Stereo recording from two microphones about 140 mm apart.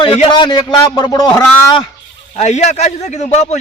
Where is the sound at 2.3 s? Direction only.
55° left (ahead or behind).